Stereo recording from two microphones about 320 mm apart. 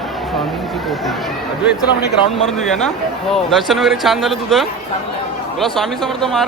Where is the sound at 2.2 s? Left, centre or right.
Centre.